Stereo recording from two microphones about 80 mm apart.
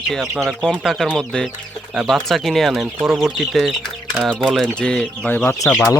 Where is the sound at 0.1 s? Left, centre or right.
Centre.